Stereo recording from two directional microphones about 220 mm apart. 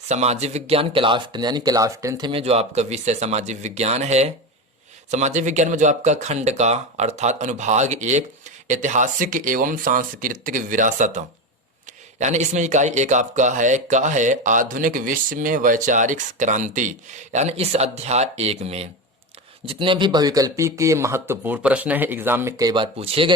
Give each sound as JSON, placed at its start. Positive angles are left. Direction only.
{"t": 0.1, "sound": "speech", "side_deg": -30}
{"t": 12.2, "sound": "speech", "side_deg": -30}